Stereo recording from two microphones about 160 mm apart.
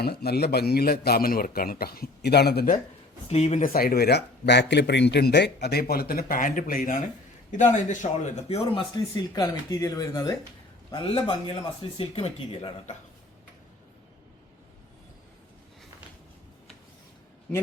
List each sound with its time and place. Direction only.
0.0 s a man's voice: 80° left
3.2 s speech: 40° left (ahead or behind)
3.7 s speech: 70° left (ahead or behind)
7.5 s speech: 50° left (ahead or behind)
8.9 s speech: 25° left (ahead or behind)
10.9 s speech: 30° left (ahead or behind)